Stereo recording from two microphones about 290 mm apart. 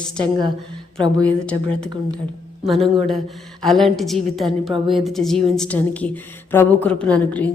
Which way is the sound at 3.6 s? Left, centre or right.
Centre.